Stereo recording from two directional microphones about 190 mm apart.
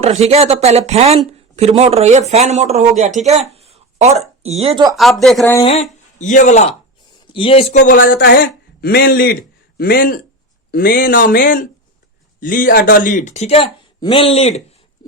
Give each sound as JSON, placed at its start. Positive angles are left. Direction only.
{"t": 0.0, "sound": "speech", "side_deg": -35}
{"t": 4.9, "sound": "speech", "side_deg": 0}
{"t": 6.1, "sound": "speech", "side_deg": 40}
{"t": 7.9, "sound": "a man's voice", "side_deg": 50}